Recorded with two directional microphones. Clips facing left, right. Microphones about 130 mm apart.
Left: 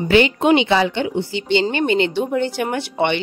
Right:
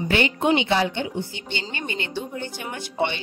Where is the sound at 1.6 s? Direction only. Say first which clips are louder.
Left 13 dB; 80° left.